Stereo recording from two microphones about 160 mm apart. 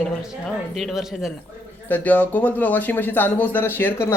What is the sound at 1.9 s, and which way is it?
Speech, 10° left (ahead or behind).